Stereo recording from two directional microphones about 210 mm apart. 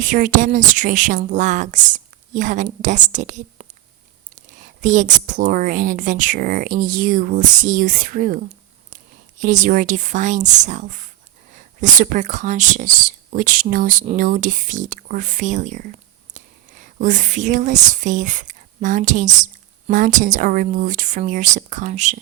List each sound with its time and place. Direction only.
0.0 s speech: 40° right (ahead or behind)
9.4 s speech: 40° right (ahead or behind)